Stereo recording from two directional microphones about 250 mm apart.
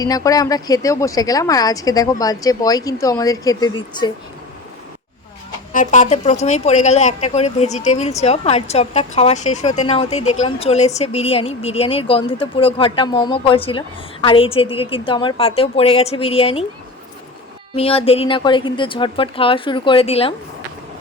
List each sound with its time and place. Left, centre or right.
0.0 s a woman's voice: centre
5.7 s a woman's voice: left
17.7 s a woman's voice: left